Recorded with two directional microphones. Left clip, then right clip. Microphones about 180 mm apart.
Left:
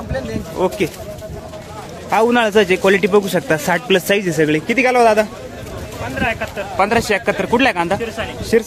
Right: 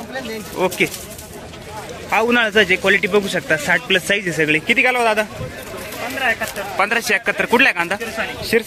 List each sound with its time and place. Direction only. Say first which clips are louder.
0.6 s speech: left 1 dB; 10° left (ahead or behind)
2.0 s a man's voice: left 3 dB; 15° left (ahead or behind)
2.3 s a man's voice: left 1 dB; 25° left (ahead or behind)
4.6 s speech: left 5 dB; 10° left (ahead or behind)
6.7 s speech: left 2 dB; 5° left (ahead or behind)